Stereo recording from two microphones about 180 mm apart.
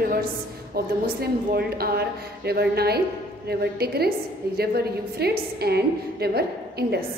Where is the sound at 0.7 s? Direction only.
60° right (ahead or behind).